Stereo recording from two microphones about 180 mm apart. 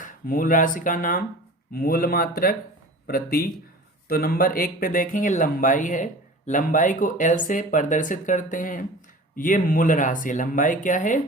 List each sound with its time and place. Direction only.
0.0 s speech: 50° left (ahead or behind)